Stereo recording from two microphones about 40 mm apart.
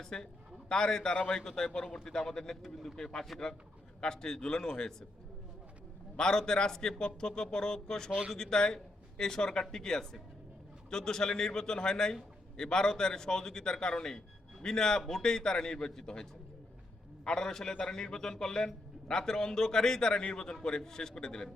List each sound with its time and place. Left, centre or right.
0.0 s a man's voice: centre
1.1 s a man's voice: left
6.1 s a man's voice: centre
17.2 s a man's voice: centre